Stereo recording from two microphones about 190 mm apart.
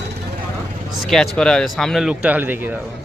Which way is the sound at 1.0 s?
Centre (ahead or behind).